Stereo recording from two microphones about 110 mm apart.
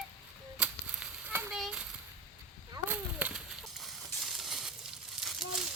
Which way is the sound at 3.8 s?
Centre (ahead or behind).